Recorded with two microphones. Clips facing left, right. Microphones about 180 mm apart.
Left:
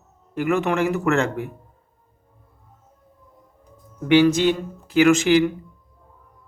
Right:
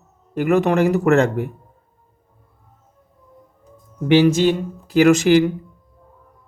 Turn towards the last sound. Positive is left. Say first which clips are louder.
# right 3 dB
turn(degrees=-40)  # may be behind; listen again after turning